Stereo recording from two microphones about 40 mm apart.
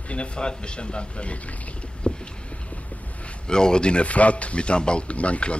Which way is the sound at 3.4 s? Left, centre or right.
Centre.